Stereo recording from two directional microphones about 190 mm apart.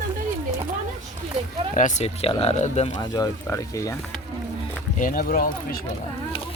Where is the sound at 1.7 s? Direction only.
40° left (ahead or behind).